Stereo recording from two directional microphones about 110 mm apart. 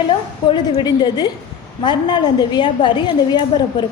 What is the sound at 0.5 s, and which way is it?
A woman's voice, 45° left (ahead or behind).